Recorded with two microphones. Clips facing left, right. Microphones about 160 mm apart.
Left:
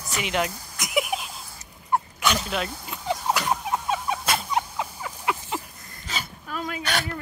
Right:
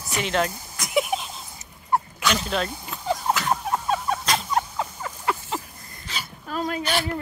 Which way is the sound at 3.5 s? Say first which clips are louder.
Right 2 dB; centre (ahead or behind).